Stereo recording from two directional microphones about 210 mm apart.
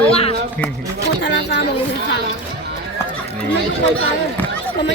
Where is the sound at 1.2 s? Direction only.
55° left (ahead or behind).